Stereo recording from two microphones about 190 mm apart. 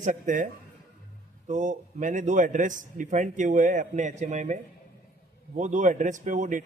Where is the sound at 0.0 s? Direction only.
40° right (ahead or behind).